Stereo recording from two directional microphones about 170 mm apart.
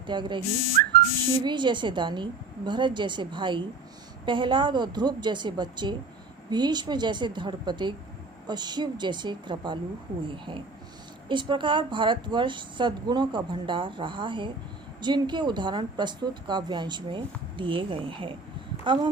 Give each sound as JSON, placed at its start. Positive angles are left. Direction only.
{"t": 0.1, "sound": "a woman's voice", "side_deg": -30}
{"t": 1.5, "sound": "a woman's voice", "side_deg": -25}